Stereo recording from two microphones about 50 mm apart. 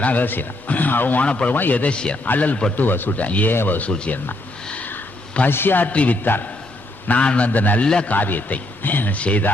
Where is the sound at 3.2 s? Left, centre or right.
Left.